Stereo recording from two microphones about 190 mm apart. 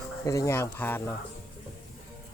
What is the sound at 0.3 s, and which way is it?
Speech, 15° left (ahead or behind).